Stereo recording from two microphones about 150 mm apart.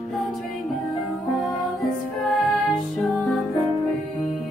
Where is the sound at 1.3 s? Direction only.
Centre (ahead or behind).